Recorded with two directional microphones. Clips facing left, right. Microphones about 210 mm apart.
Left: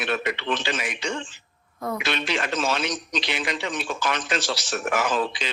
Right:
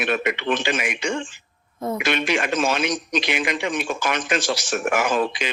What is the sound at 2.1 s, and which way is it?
Speech, 15° right (ahead or behind).